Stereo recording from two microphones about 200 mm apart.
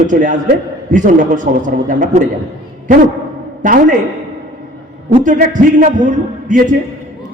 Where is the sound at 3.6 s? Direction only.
40° right (ahead or behind).